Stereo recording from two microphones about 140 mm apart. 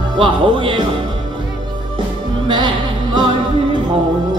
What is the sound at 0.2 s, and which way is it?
Speech, 35° right (ahead or behind).